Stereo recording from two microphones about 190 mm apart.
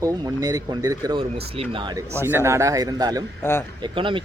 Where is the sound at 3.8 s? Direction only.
25° right (ahead or behind).